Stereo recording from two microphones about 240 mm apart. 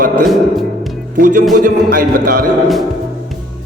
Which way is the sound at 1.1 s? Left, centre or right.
Right.